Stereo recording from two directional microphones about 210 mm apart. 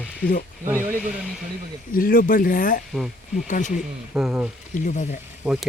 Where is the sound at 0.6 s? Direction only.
10° right (ahead or behind).